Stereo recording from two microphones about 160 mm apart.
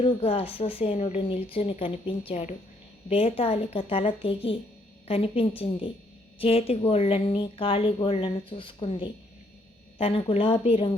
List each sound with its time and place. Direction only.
0.0 s speech: 35° left (ahead or behind)